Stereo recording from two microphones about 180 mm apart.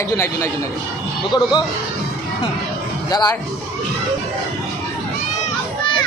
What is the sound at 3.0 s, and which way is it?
Speech, 20° left (ahead or behind).